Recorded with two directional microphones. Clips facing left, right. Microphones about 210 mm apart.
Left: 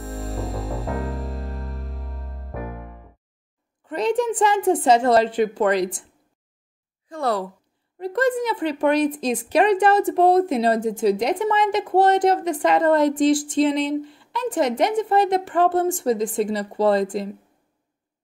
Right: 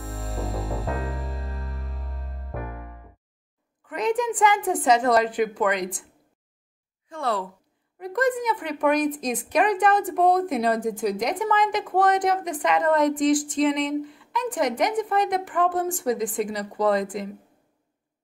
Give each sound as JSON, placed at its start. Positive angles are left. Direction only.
{"t": 0.0, "sound": "music", "side_deg": 0}
{"t": 3.8, "sound": "a sound", "side_deg": 30}
{"t": 4.8, "sound": "speech", "side_deg": 30}
{"t": 7.1, "sound": "speech", "side_deg": 40}